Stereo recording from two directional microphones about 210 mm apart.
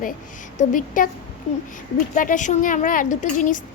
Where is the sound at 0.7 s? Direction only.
40° left (ahead or behind).